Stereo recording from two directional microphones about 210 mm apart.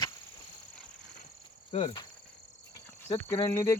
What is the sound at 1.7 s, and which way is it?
Cricket, 25° left (ahead or behind).